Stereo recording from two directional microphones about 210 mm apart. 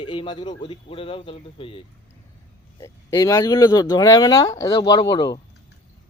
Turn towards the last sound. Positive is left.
turn(degrees=20)  # may be behind; listen again after turning